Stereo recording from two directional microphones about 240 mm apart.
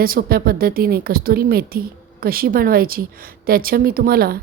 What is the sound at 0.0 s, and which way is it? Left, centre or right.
A woman's voice, right.